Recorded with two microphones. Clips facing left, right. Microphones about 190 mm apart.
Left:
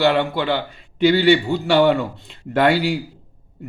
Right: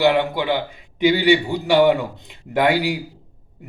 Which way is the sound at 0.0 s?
15° right (ahead or behind).